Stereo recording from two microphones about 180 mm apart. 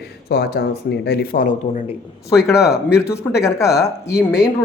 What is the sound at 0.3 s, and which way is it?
Speech, 65° left (ahead or behind).